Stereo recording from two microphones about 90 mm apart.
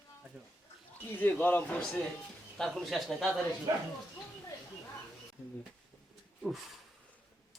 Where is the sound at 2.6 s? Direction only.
Centre (ahead or behind).